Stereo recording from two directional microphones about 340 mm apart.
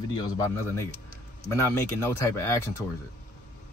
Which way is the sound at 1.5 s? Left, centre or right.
Centre.